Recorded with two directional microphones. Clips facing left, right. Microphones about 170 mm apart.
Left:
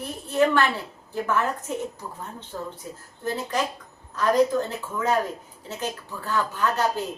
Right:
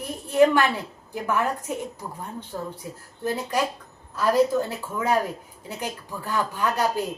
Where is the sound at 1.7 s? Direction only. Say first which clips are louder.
Even; 15° right (ahead or behind).